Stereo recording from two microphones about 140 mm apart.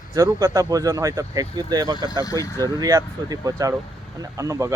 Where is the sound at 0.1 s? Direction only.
25° right (ahead or behind).